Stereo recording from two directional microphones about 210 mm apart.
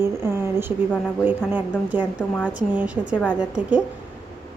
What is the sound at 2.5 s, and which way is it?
Speech, 5° right (ahead or behind).